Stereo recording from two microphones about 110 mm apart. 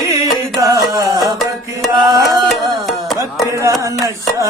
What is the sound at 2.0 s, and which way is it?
Music, 30° right (ahead or behind).